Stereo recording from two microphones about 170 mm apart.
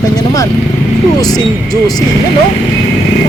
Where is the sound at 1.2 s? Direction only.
20° left (ahead or behind).